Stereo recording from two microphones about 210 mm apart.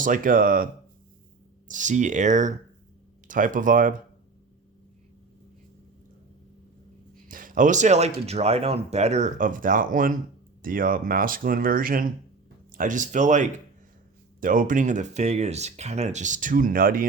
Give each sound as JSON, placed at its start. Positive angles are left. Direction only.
{"t": 0.0, "sound": "speech", "side_deg": -40}
{"t": 7.3, "sound": "speech", "side_deg": -40}